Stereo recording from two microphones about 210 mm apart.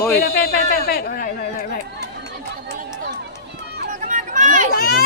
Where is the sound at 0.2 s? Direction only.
45° left (ahead or behind).